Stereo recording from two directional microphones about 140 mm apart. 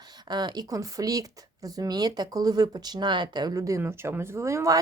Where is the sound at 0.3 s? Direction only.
30° right (ahead or behind).